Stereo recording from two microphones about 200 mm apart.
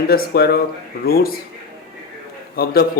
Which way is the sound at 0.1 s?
50° left (ahead or behind).